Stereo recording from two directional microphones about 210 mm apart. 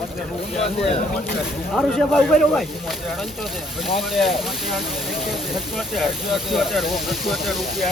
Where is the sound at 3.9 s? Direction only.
Centre (ahead or behind).